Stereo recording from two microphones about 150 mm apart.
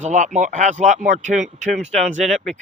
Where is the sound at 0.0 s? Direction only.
55° right (ahead or behind).